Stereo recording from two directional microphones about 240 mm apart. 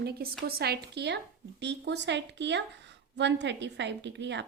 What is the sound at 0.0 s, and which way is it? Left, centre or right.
Speech, right.